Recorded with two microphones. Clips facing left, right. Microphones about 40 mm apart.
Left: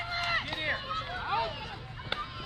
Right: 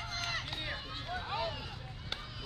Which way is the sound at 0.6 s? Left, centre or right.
Left.